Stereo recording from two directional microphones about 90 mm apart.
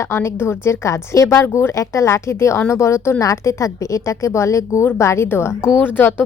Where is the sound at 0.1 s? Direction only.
25° left (ahead or behind).